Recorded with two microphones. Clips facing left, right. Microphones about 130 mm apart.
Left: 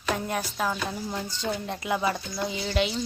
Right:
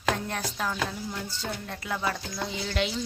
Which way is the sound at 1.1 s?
20° left (ahead or behind).